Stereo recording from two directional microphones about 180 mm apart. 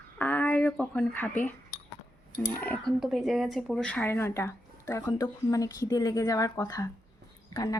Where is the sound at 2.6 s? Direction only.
5° left (ahead or behind).